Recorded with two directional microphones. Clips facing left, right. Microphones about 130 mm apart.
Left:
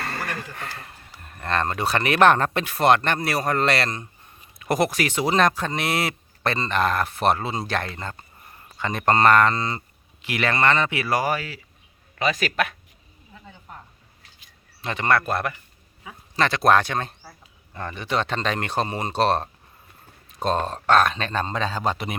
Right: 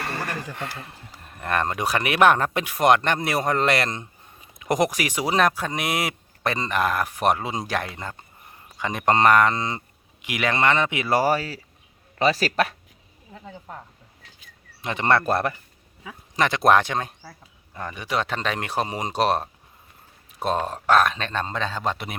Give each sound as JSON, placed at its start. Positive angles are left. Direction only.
{"t": 0.0, "sound": "a sound", "side_deg": -20}
{"t": 1.3, "sound": "speech", "side_deg": -15}
{"t": 14.8, "sound": "speech", "side_deg": -15}
{"t": 15.0, "sound": "speech", "side_deg": -30}
{"t": 16.3, "sound": "a man's voice", "side_deg": -15}